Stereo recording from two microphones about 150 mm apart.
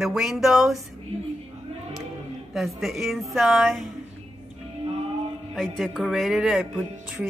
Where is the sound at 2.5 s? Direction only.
Centre (ahead or behind).